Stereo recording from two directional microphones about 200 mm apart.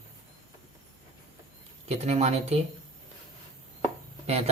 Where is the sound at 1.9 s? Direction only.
35° right (ahead or behind).